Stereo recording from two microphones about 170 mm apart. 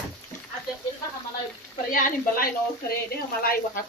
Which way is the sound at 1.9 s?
60° left (ahead or behind).